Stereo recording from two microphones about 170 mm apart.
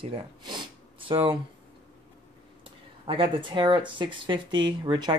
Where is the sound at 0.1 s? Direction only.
30° right (ahead or behind).